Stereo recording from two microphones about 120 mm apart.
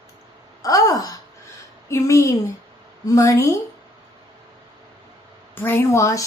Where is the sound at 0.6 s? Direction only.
30° left (ahead or behind).